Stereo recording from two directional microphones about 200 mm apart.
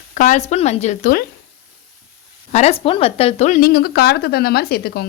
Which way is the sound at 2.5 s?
35° left (ahead or behind).